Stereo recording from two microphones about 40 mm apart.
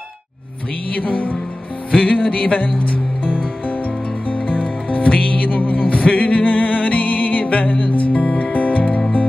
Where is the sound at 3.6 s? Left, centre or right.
Left.